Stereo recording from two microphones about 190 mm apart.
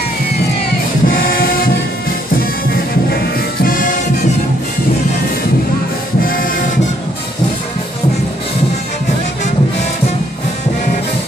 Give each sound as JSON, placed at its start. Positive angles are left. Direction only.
{"t": 1.0, "sound": "choir", "side_deg": 50}
{"t": 2.7, "sound": "music", "side_deg": 55}
{"t": 6.2, "sound": "printer", "side_deg": 50}